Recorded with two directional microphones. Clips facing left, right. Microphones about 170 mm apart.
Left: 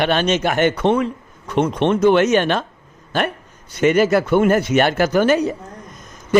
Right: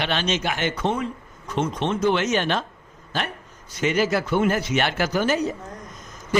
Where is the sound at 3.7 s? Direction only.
55° left (ahead or behind).